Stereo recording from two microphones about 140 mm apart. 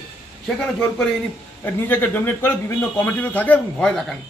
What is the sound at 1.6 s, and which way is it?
Speech, 15° left (ahead or behind).